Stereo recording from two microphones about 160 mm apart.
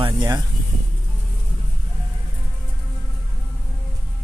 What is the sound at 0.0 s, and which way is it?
Speech, 30° right (ahead or behind).